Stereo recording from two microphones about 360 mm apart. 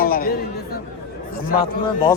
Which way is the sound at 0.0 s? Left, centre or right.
Left.